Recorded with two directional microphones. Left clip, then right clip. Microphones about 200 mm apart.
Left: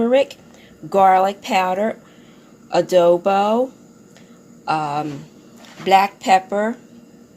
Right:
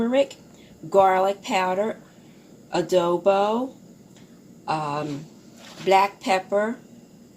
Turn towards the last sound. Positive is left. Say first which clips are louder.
# left 6 dB
turn(degrees=45)  # may be behind; listen again after turning